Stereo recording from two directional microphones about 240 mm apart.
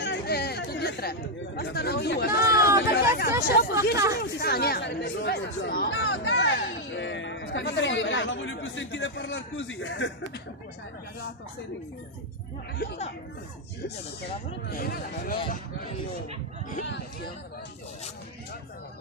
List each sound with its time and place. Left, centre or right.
0.0 s chatter: left
1.6 s speech: left
5.9 s speech: left
12.7 s speech: left
14.7 s speech: left